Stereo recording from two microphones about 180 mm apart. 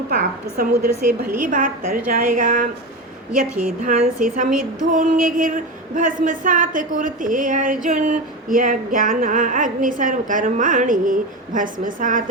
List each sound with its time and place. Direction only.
0.1 s speech: 50° right (ahead or behind)
3.8 s speech: 45° right (ahead or behind)